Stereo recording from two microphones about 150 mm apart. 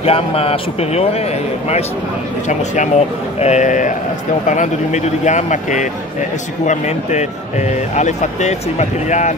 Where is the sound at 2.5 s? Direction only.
55° left (ahead or behind).